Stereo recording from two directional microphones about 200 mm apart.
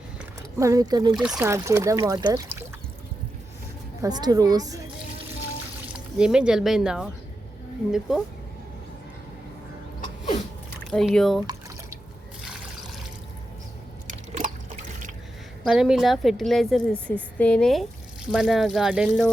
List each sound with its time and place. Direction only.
0.6 s a woman's voice: 15° right (ahead or behind)
1.1 s a woman's voice: 5° right (ahead or behind)
1.4 s speech: 15° right (ahead or behind)
4.0 s a woman's voice: 20° right (ahead or behind)
6.1 s a woman's voice: 5° right (ahead or behind)
10.9 s a woman's voice: centre (ahead or behind)
14.1 s liquid: 35° right (ahead or behind)
15.6 s a woman's voice: centre (ahead or behind)